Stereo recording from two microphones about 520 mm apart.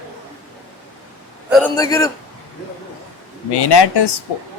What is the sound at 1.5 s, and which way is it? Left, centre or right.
Speech, centre.